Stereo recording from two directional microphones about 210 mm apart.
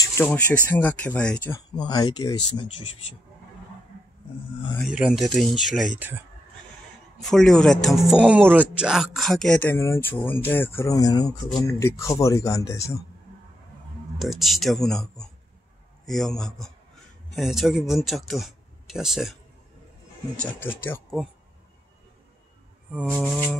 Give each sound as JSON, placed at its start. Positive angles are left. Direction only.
{"t": 0.0, "sound": "speech", "side_deg": 10}
{"t": 1.8, "sound": "speech", "side_deg": 20}
{"t": 4.8, "sound": "speech", "side_deg": -5}
{"t": 7.2, "sound": "speech", "side_deg": 5}
{"t": 14.1, "sound": "speech", "side_deg": 0}
{"t": 20.3, "sound": "speech", "side_deg": 10}
{"t": 22.8, "sound": "speech", "side_deg": -5}
{"t": 23.2, "sound": "speech", "side_deg": 5}